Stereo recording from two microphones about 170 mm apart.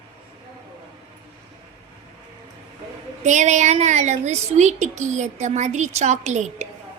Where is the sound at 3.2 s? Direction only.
45° right (ahead or behind).